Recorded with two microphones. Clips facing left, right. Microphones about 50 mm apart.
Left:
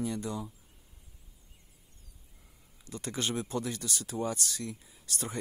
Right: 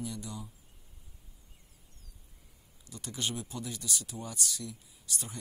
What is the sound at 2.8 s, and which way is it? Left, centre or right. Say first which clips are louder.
Speech: left 3 dB; left.